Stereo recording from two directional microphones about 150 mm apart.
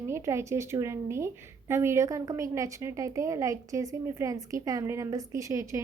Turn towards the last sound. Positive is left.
turn(degrees=-20)  # may be behind; listen again after turning